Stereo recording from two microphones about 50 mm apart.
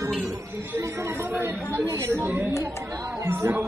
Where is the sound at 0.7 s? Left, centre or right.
Right.